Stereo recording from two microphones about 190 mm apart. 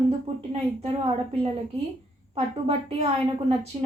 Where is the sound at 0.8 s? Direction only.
30° right (ahead or behind).